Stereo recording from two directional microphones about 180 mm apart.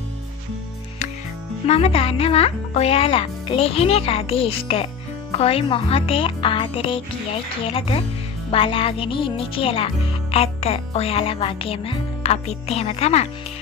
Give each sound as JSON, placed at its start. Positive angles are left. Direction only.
{"t": 1.7, "sound": "a child's voice", "side_deg": 35}